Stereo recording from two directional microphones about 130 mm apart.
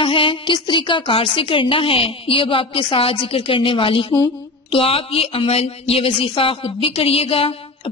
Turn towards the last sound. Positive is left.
turn(degrees=45)  # may be behind; listen again after turning